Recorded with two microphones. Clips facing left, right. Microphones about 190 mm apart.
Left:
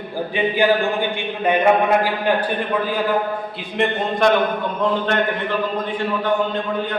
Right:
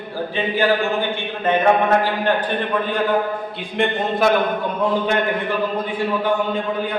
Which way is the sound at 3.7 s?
Centre (ahead or behind).